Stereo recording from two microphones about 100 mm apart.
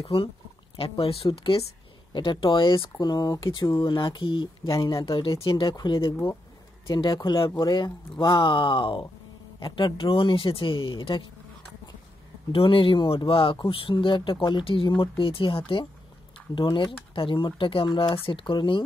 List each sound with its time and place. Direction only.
0.0 s speech: 75° left (ahead or behind)
2.1 s speech: 55° left (ahead or behind)
3.0 s speech: 40° left (ahead or behind)
3.8 s speech: 50° left (ahead or behind)
12.5 s speech: 60° left (ahead or behind)